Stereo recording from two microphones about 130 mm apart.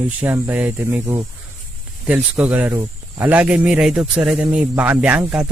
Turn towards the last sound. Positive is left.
turn(degrees=-10)  # may be behind; listen again after turning